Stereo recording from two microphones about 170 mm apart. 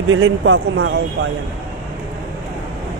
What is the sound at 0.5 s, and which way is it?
Speech, 90° right.